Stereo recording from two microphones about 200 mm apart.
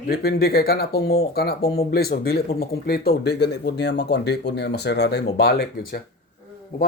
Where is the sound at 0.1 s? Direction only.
50° left (ahead or behind).